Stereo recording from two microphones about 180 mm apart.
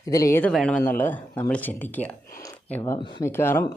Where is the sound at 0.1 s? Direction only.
15° left (ahead or behind).